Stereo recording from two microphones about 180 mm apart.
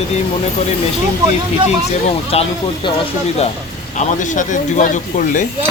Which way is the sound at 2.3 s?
35° left (ahead or behind).